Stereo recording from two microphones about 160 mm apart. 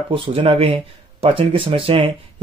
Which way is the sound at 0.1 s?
35° right (ahead or behind).